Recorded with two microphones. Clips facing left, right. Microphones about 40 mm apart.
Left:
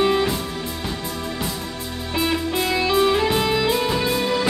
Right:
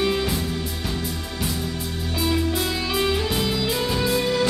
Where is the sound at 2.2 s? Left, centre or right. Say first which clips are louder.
Left 1 dB; left.